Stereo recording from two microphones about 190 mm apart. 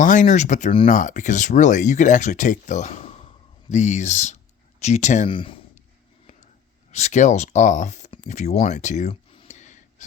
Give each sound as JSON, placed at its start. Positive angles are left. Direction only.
{"t": 0.0, "sound": "speech", "side_deg": 40}
{"t": 6.9, "sound": "speech", "side_deg": 35}